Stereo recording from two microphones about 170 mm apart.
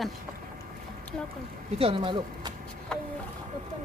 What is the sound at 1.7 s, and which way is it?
Speech, 30° right (ahead or behind).